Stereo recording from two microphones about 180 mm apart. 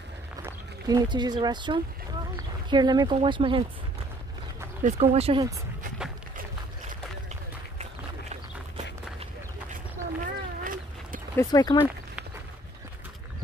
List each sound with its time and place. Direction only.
0.5 s speech: 20° right (ahead or behind)
4.8 s speech: 35° right (ahead or behind)
10.2 s cat: 50° right (ahead or behind)
11.3 s speech: 20° left (ahead or behind)